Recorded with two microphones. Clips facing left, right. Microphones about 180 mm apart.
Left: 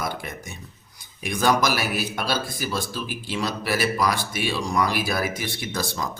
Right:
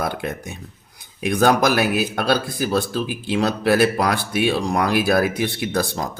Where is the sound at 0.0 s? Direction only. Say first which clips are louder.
Right 6 dB; 60° right (ahead or behind).